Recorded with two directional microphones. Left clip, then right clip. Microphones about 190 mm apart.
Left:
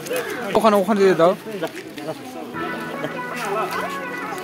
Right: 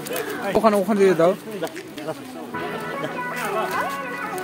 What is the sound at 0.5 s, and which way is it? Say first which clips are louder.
Speech: left 2 dB; centre (ahead or behind).